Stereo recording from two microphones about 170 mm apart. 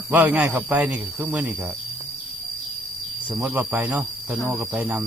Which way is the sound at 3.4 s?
5° right (ahead or behind).